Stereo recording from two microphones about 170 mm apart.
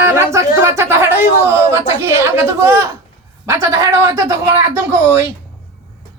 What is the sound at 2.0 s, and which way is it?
A woman's voice, 15° right (ahead or behind).